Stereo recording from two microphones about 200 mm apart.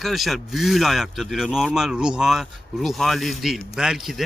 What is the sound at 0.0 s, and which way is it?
Speech, centre (ahead or behind).